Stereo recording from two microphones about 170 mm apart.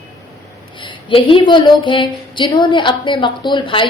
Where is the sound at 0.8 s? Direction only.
30° left (ahead or behind).